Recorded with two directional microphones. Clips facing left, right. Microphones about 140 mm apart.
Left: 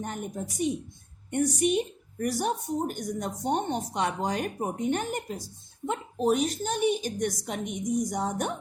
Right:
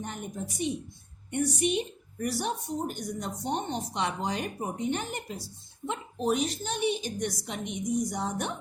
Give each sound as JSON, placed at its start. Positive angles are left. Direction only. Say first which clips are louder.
{"t": 0.0, "sound": "a woman's voice", "louder": "left 3 dB", "side_deg": 45}